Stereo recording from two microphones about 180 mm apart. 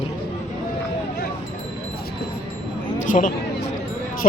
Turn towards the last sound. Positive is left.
turn(degrees=45)  # may be behind; listen again after turning